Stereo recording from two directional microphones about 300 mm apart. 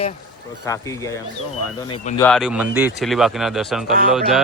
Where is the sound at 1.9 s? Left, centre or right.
Left.